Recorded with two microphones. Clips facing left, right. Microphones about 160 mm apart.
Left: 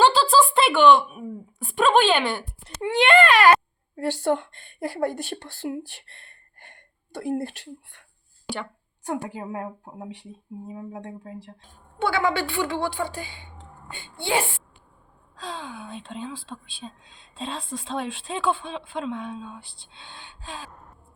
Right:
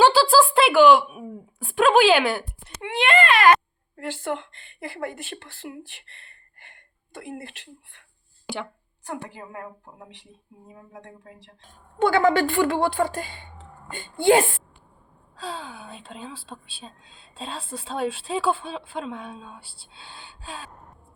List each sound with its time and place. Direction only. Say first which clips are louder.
0.0 s a sound: right 2 dB; 5° right (ahead or behind)
2.6 s a child's voice: left 4 dB; 35° left (ahead or behind)
10.8 s a child's voice: left 8 dB; 35° left (ahead or behind)
12.0 s a woman's voice: right 5 dB; 45° right (ahead or behind)
15.4 s speech: even; 5° right (ahead or behind)